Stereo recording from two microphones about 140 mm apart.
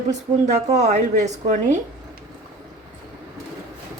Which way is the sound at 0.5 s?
55° right (ahead or behind).